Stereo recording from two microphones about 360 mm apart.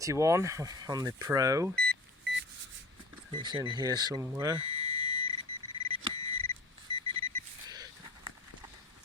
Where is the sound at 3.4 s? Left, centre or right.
Centre.